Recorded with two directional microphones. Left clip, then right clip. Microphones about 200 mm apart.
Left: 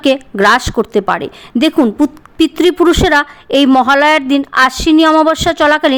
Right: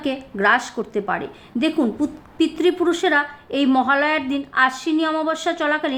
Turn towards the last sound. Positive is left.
turn(degrees=40)  # may be behind; listen again after turning